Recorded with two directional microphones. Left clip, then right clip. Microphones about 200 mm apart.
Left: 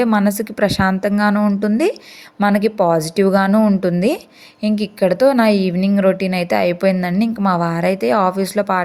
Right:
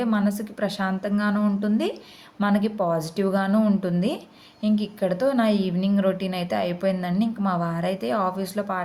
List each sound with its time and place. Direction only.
0.0 s a woman's voice: 40° left (ahead or behind)